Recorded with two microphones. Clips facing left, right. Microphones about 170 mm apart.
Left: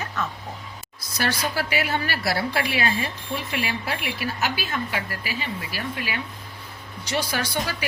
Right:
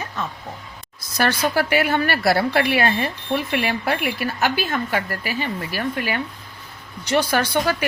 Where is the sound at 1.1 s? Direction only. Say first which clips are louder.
Right 6 dB; 55° right (ahead or behind).